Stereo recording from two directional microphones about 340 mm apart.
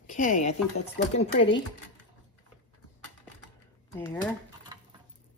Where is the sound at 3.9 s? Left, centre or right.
Centre.